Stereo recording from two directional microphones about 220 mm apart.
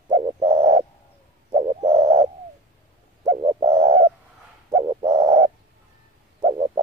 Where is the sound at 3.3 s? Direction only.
20° right (ahead or behind).